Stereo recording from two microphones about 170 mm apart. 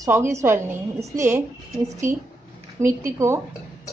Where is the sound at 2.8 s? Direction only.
15° right (ahead or behind).